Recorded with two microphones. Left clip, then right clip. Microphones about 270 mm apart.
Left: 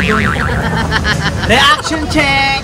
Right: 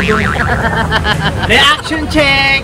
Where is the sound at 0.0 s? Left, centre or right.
Centre.